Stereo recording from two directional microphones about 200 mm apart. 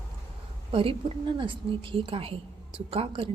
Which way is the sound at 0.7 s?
25° right (ahead or behind).